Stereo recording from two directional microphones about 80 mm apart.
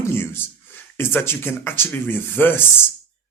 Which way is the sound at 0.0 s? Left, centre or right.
Left.